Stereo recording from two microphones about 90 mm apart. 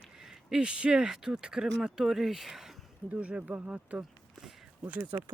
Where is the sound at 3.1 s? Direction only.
15° right (ahead or behind).